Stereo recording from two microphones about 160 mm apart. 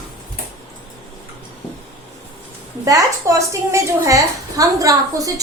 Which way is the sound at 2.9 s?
20° right (ahead or behind).